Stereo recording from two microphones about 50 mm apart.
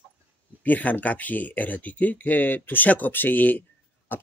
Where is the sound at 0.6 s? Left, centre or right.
Left.